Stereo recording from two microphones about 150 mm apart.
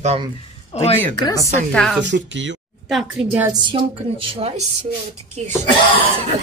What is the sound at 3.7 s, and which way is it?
Speech, 35° right (ahead or behind).